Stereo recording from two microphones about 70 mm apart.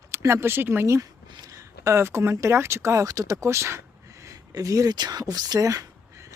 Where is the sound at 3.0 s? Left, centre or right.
Right.